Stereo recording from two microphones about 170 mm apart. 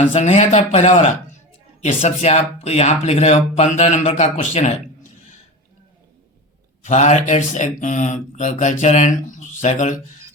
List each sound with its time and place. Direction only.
0.0 s speech: 40° left (ahead or behind)
6.8 s speech: 45° left (ahead or behind)